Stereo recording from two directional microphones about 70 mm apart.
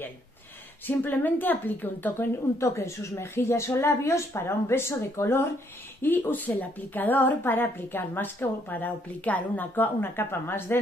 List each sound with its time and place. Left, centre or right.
0.8 s a woman's voice: left
2.6 s a woman's voice: left